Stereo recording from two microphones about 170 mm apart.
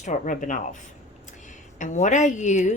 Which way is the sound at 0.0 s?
45° left (ahead or behind).